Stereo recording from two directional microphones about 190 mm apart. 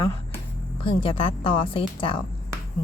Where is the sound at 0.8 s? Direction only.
30° left (ahead or behind).